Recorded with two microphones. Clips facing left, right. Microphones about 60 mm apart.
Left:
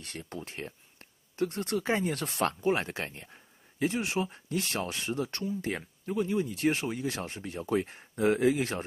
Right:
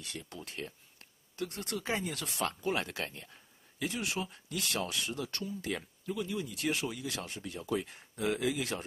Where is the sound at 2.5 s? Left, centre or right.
Left.